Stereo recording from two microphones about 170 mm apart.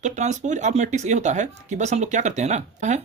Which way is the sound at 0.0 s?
45° right (ahead or behind).